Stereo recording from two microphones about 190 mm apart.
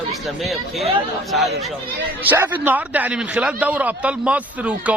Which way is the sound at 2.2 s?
10° right (ahead or behind).